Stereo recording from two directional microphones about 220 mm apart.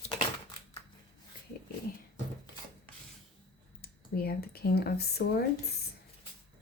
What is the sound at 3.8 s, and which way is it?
Speech, 45° left (ahead or behind).